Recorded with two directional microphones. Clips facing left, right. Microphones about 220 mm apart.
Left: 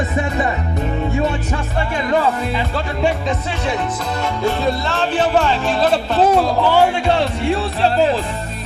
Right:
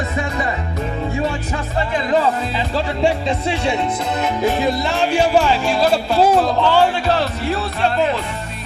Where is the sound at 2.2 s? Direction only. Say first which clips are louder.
Even; 30° right (ahead or behind); by 6.5 s 5° right (ahead or behind).